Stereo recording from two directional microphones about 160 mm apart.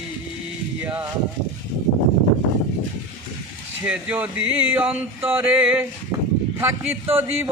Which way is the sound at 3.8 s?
10° right (ahead or behind).